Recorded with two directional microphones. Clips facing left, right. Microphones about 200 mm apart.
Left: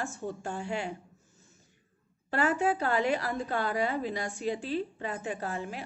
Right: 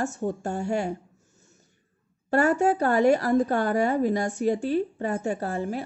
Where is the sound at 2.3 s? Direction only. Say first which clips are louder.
Right 6 dB; 45° right (ahead or behind).